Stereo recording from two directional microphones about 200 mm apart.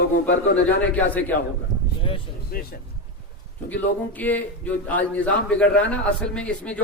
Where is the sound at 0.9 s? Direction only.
10° left (ahead or behind).